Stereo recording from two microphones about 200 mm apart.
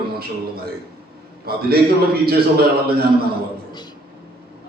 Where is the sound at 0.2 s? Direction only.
50° right (ahead or behind).